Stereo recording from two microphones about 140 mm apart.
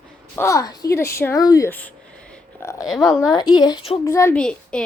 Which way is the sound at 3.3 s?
30° left (ahead or behind).